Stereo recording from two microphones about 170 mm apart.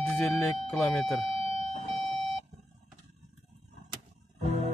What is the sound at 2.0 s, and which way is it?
Alarm clock, centre (ahead or behind).